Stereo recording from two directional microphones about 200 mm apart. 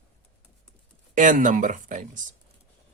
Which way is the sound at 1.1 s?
40° right (ahead or behind).